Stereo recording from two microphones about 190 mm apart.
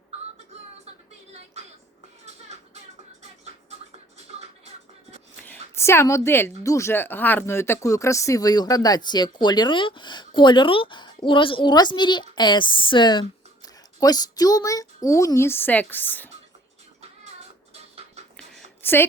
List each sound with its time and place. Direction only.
2.2 s music: 35° right (ahead or behind)
5.7 s a woman's voice: 15° left (ahead or behind)
18.3 s a sound: 5° left (ahead or behind)